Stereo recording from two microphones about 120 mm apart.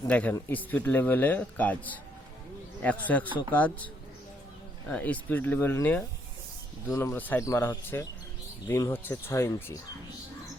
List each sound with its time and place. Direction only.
0.1 s a man's voice: 10° left (ahead or behind)
4.9 s a man's voice: 15° left (ahead or behind)